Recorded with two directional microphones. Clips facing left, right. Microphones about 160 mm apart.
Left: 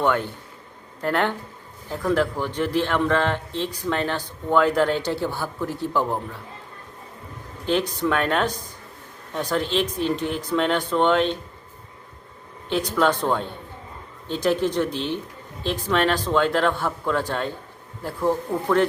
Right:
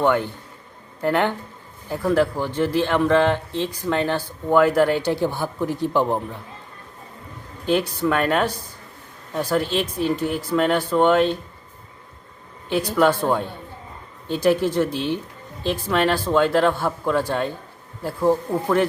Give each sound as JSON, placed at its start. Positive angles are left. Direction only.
{"t": 0.0, "sound": "speech", "side_deg": -15}
{"t": 7.7, "sound": "speech", "side_deg": -10}
{"t": 12.6, "sound": "speech", "side_deg": -10}